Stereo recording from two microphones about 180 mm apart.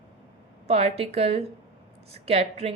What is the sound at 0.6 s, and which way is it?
Speech, 35° right (ahead or behind).